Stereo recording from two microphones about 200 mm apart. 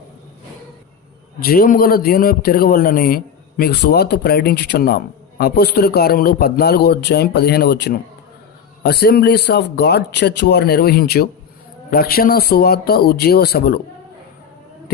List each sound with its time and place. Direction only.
1.4 s a man's voice: 45° left (ahead or behind)